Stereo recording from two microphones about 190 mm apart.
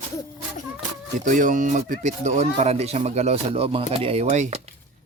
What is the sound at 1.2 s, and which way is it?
Speech, 45° right (ahead or behind).